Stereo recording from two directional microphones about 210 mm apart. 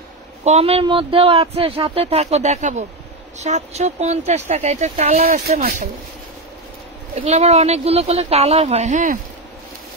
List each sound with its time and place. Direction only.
0.4 s speech: 30° right (ahead or behind)
7.2 s speech: 30° right (ahead or behind)